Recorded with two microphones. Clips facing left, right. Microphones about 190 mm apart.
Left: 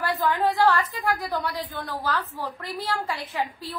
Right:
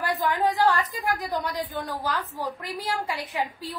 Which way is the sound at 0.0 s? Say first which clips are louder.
Left 1 dB; 15° right (ahead or behind).